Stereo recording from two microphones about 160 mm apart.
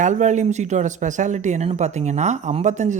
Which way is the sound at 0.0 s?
50° right (ahead or behind).